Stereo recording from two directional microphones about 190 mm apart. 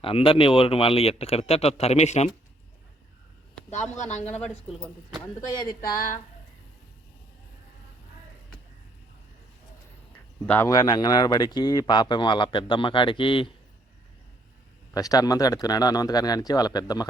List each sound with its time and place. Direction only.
0.0 s speech: 30° left (ahead or behind)
3.9 s speech: 40° left (ahead or behind)
5.5 s speech: 20° left (ahead or behind)
10.4 s speech: 10° left (ahead or behind); by 13.5 s 25° left (ahead or behind)
14.9 s speech: 20° left (ahead or behind)